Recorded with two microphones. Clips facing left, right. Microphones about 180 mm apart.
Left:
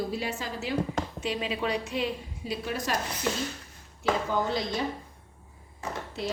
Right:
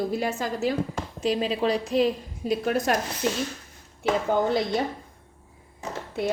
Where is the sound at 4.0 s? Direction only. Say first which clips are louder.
Right 4 dB; 55° right (ahead or behind).